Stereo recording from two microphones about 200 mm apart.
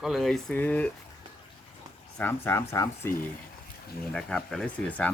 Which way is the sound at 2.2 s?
10° left (ahead or behind).